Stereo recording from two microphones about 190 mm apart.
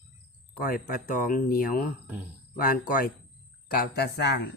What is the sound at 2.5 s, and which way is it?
Speech, 50° left (ahead or behind).